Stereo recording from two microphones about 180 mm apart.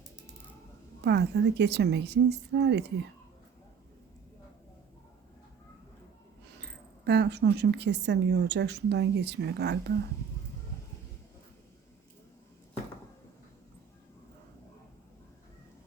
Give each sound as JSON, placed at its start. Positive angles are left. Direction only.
{"t": 1.0, "sound": "speech", "side_deg": -70}
{"t": 6.6, "sound": "speech", "side_deg": -70}